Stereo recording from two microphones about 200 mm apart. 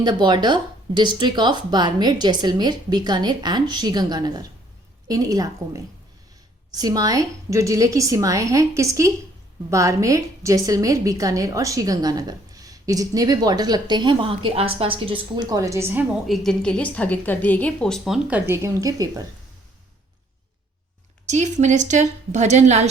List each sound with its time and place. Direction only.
0.0 s a woman's voice: 20° right (ahead or behind)
16.2 s a woman's voice: centre (ahead or behind); by 19.2 s 20° right (ahead or behind)
21.2 s a woman's voice: 35° right (ahead or behind)